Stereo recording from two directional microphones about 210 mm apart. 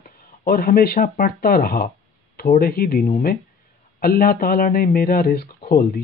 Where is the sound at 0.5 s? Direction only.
45° left (ahead or behind).